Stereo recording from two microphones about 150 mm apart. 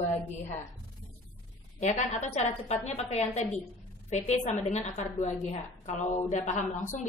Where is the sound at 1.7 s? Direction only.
50° left (ahead or behind).